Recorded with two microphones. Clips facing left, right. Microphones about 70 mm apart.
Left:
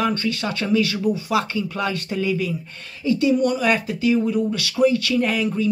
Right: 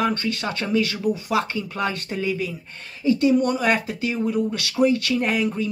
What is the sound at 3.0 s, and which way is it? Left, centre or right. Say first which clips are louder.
Speech: even; right.